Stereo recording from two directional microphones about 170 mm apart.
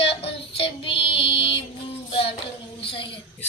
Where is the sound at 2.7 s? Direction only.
30° left (ahead or behind).